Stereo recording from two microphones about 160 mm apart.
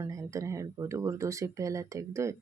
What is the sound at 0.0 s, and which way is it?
Speech, 20° right (ahead or behind).